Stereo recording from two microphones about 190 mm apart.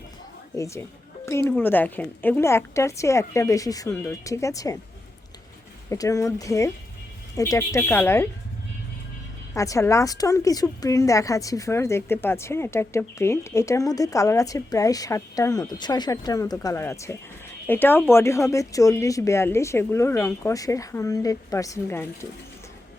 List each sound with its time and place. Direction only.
0.5 s a woman's voice: 15° left (ahead or behind)
5.9 s a woman's voice: 15° left (ahead or behind)
9.6 s a woman's voice: 15° left (ahead or behind)